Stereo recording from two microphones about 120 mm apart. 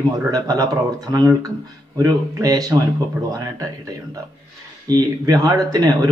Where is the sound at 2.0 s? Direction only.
30° right (ahead or behind).